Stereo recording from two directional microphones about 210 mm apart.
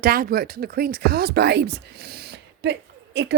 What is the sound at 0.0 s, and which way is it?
Speech, 45° right (ahead or behind).